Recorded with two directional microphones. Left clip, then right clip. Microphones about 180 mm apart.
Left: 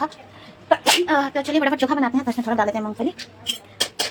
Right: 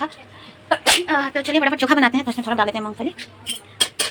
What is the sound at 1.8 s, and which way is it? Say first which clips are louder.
Speech: right 4 dB; 30° right (ahead or behind).